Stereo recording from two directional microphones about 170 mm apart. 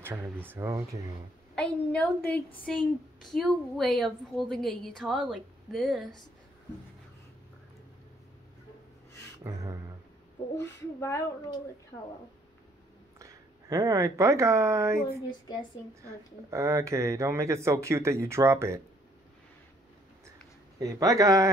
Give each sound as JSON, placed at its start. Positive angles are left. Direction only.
{"t": 0.0, "sound": "speech", "side_deg": -15}
{"t": 1.5, "sound": "a woman's voice", "side_deg": 5}
{"t": 9.4, "sound": "speech", "side_deg": -20}
{"t": 10.6, "sound": "speech", "side_deg": 15}
{"t": 13.2, "sound": "speech", "side_deg": -20}
{"t": 16.4, "sound": "speech", "side_deg": -15}
{"t": 20.8, "sound": "speech", "side_deg": -20}